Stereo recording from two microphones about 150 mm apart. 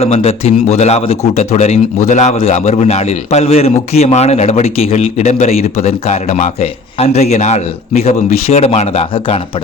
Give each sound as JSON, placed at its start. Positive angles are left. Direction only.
{"t": 0.0, "sound": "a man's voice", "side_deg": 40}